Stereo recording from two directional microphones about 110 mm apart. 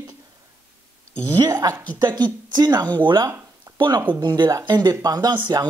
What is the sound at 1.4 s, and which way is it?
Speech, 35° right (ahead or behind).